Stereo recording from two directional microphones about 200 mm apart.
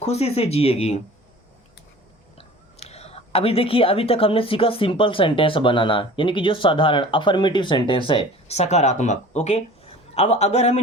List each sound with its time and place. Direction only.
0.0 s speech: 30° left (ahead or behind)
2.7 s speech: 30° left (ahead or behind)